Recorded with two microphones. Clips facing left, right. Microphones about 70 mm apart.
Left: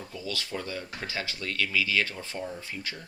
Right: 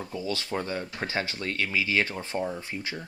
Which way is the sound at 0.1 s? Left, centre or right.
Right.